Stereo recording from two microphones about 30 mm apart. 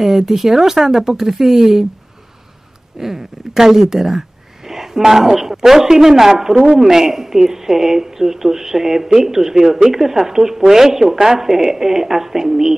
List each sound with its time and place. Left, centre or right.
0.0 s a woman's voice: centre
3.0 s a woman's voice: centre